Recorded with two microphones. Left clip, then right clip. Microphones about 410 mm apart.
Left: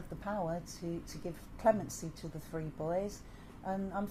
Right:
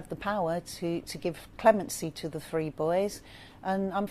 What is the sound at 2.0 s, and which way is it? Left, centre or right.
A woman's voice, right.